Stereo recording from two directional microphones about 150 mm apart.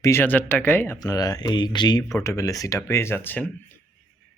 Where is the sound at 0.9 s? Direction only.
25° left (ahead or behind).